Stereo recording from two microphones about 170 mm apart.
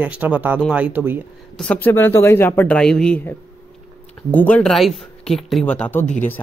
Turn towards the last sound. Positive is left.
turn(degrees=10)  # may be behind; listen again after turning